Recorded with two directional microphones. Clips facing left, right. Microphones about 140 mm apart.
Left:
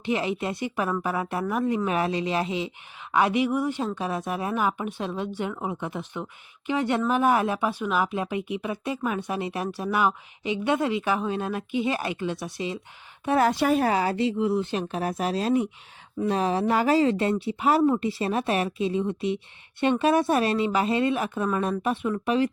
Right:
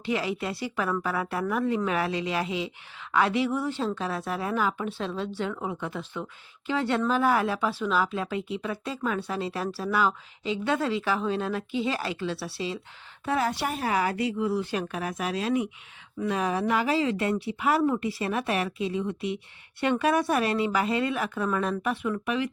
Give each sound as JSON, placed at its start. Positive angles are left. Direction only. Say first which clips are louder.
{"t": 0.0, "sound": "speech", "louder": "left 2 dB", "side_deg": 20}
{"t": 13.4, "sound": "speech", "louder": "left 7 dB", "side_deg": 75}
{"t": 13.9, "sound": "speech", "louder": "left 2 dB", "side_deg": 30}
{"t": 17.2, "sound": "speech", "louder": "left 2 dB", "side_deg": 25}